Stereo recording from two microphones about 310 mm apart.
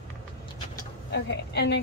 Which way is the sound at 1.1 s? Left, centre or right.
Left.